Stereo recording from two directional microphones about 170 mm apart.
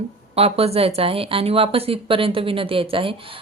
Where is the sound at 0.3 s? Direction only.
35° right (ahead or behind).